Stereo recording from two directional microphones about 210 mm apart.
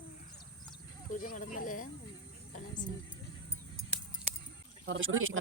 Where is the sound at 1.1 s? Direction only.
40° left (ahead or behind).